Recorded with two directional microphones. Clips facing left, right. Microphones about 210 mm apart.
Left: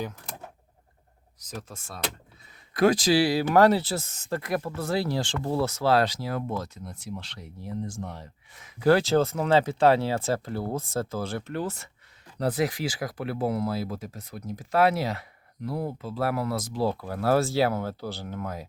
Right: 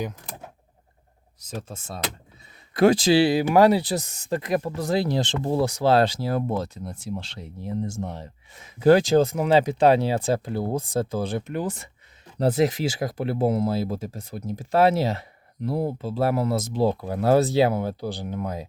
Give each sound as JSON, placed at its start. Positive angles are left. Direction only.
{"t": 1.4, "sound": "speech", "side_deg": -25}
{"t": 12.4, "sound": "speech", "side_deg": -25}